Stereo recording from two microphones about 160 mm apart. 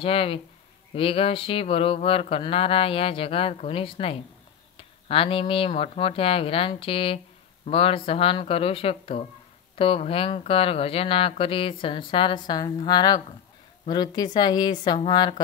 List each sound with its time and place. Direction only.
0.0 s speech: 35° left (ahead or behind)